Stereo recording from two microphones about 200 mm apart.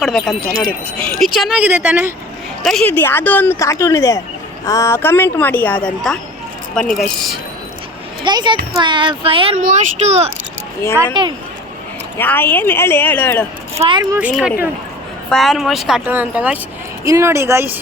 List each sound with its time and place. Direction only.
0.0 s speech: centre (ahead or behind)
2.6 s a woman's voice: 5° left (ahead or behind)
8.2 s speech: 20° right (ahead or behind)
10.9 s speech: 20° right (ahead or behind)
12.1 s a woman's voice: 10° left (ahead or behind)
13.7 s speech: 25° right (ahead or behind)